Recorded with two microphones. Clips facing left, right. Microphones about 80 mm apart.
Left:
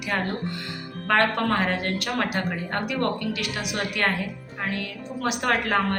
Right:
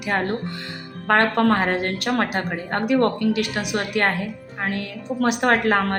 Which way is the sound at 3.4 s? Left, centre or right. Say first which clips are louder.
Right 5 dB; right.